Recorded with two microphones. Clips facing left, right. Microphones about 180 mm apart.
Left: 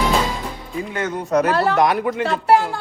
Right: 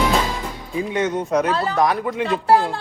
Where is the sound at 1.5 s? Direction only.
70° left (ahead or behind).